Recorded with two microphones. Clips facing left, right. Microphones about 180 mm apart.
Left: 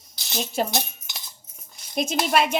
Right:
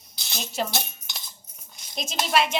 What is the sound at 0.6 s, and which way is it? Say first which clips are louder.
Speech: left 3 dB; 45° left (ahead or behind).